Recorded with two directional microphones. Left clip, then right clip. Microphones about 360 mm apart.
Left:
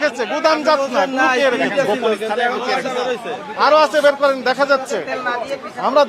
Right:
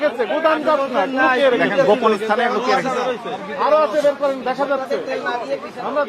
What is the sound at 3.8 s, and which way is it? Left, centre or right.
A man's voice, left.